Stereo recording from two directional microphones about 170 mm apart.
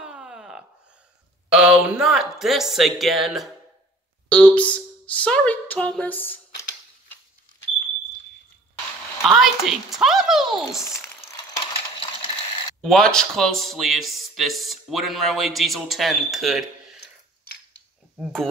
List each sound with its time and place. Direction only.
0.0 s a sound: 5° right (ahead or behind)
1.5 s speech: 5° right (ahead or behind); by 6.6 s 10° left (ahead or behind)
9.2 s speech: centre (ahead or behind)
12.0 s coin: 30° left (ahead or behind)
12.8 s speech: 5° left (ahead or behind)
18.1 s speech: centre (ahead or behind)